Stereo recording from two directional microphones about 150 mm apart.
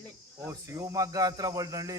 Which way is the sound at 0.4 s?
20° right (ahead or behind).